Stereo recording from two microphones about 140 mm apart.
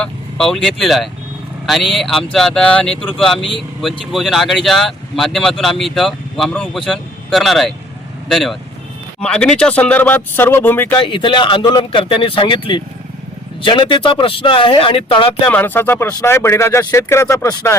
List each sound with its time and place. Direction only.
0.0 s speech: 5° left (ahead or behind)
11.0 s speech: 35° left (ahead or behind)
15.4 s speech: 10° left (ahead or behind)